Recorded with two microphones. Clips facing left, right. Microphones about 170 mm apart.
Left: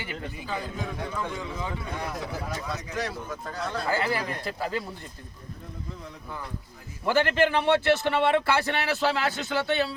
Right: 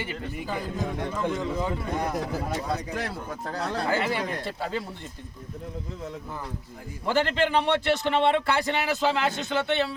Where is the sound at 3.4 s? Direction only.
65° right (ahead or behind).